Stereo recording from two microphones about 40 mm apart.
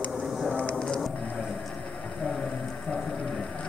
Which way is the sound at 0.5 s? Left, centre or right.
Left.